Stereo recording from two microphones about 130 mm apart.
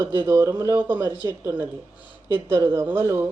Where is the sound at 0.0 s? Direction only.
15° right (ahead or behind).